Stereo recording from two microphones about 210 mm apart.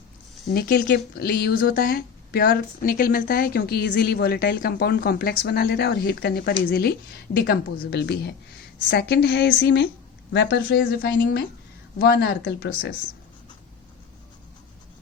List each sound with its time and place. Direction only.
0.5 s a woman's voice: 50° left (ahead or behind)